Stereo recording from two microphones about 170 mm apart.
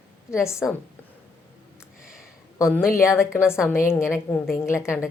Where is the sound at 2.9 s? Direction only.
15° left (ahead or behind).